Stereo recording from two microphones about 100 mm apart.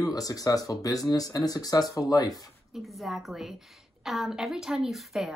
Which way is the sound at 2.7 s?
Centre (ahead or behind).